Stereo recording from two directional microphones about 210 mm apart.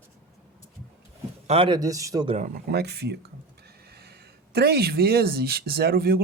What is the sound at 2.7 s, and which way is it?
Speech, 50° right (ahead or behind).